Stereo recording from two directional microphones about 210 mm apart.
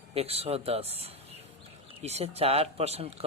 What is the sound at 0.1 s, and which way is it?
Speech, 30° right (ahead or behind).